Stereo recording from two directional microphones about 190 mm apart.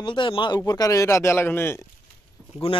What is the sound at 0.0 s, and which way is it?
A man's voice, 25° left (ahead or behind).